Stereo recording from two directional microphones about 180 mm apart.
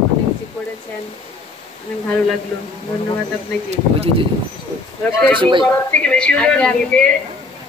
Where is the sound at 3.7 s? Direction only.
35° right (ahead or behind).